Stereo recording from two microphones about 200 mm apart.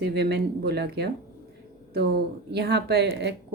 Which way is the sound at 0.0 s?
55° right (ahead or behind).